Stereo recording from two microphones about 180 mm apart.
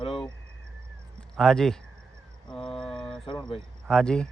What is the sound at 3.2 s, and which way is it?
Cricket, 25° left (ahead or behind).